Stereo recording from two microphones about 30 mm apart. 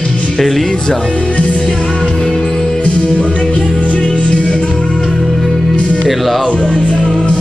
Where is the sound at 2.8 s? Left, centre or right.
Left.